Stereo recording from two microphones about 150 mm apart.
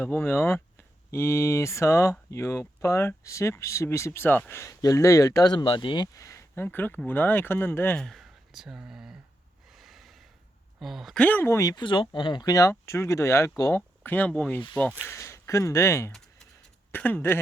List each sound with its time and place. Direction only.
0.0 s speech: 15° left (ahead or behind); by 9.1 s 5° right (ahead or behind)
9.6 s snort: centre (ahead or behind)
10.8 s speech: centre (ahead or behind)